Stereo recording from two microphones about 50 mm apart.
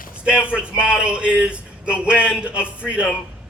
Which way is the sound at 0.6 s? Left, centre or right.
Right.